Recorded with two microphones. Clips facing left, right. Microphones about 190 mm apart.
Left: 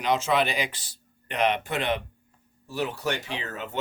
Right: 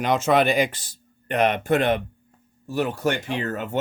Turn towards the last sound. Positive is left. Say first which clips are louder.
# right 8 dB
turn(degrees=-50)  # may be behind; listen again after turning